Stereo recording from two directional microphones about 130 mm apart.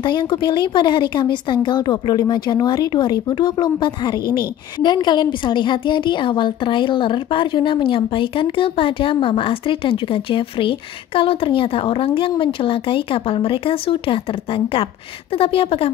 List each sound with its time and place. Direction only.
0.0 s a woman's voice: 35° left (ahead or behind)